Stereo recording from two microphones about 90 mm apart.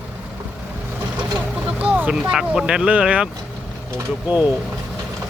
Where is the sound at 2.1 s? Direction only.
5° right (ahead or behind).